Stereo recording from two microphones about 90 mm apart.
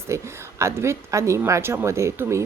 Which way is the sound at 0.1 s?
35° right (ahead or behind).